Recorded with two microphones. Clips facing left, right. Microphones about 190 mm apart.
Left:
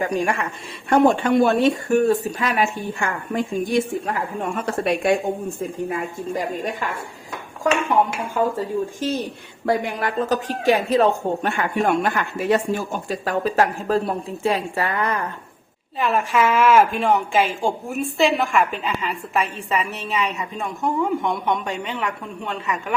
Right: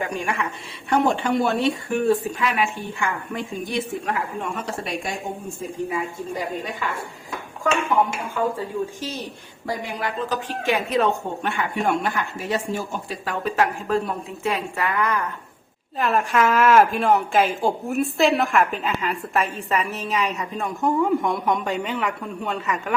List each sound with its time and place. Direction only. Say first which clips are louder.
0.0 s a woman's voice: left 4 dB; 40° left (ahead or behind)
4.5 s a woman's voice: left 6 dB; 60° left (ahead or behind)
8.5 s a woman's voice: left 3 dB; 50° left (ahead or behind)
12.0 s a woman's voice: left 5 dB; 55° left (ahead or behind)
13.1 s a woman's voice: left 4 dB; 40° left (ahead or behind)
16.0 s speech: left 1 dB; centre (ahead or behind)